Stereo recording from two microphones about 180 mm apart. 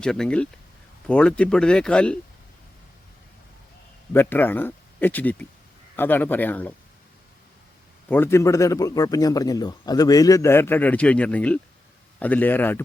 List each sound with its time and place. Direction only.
0.0 s speech: 5° left (ahead or behind)
4.1 s a man's voice: 10° left (ahead or behind)
8.1 s a man's voice: 15° left (ahead or behind)